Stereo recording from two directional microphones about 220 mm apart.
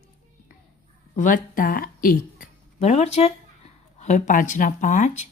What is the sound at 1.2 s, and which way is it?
Speech, 35° left (ahead or behind).